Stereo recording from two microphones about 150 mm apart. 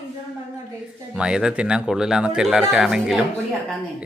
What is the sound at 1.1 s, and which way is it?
Speech, 5° right (ahead or behind).